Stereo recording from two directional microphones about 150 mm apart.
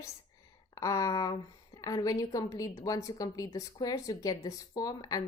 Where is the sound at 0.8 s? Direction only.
20° left (ahead or behind).